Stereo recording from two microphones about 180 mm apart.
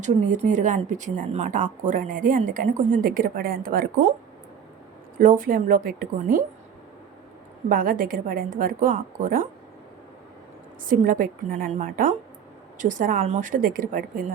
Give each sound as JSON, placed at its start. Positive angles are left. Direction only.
{"t": 0.0, "sound": "a woman's voice", "side_deg": -40}
{"t": 5.1, "sound": "a woman's voice", "side_deg": -50}
{"t": 7.7, "sound": "a woman's voice", "side_deg": -50}
{"t": 10.8, "sound": "a woman's voice", "side_deg": -50}